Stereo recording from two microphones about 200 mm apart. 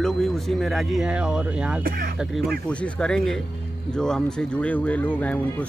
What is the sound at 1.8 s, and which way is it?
Speech, 45° right (ahead or behind).